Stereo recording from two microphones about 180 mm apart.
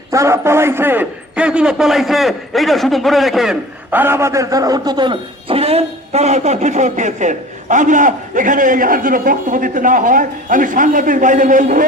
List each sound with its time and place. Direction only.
0.1 s a man's voice: 15° right (ahead or behind); by 11.9 s 45° right (ahead or behind)